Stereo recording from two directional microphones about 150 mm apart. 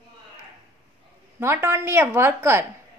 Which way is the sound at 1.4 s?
15° right (ahead or behind).